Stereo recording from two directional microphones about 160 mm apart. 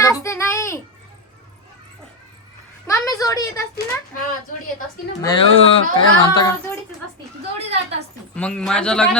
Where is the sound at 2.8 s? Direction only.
20° left (ahead or behind).